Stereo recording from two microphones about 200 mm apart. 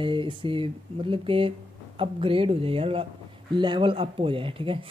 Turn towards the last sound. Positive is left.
turn(degrees=-25)  # may be behind; listen again after turning